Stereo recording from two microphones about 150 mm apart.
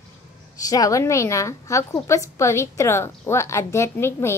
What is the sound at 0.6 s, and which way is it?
Speech, 25° left (ahead or behind).